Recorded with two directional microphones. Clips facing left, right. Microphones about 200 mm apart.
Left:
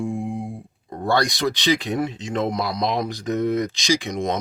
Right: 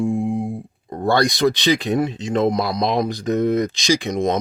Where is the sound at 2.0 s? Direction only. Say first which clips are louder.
Right 5 dB; 30° right (ahead or behind).